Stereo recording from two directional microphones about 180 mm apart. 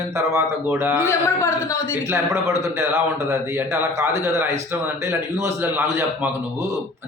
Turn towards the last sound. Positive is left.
turn(degrees=-15)  # may be behind; listen again after turning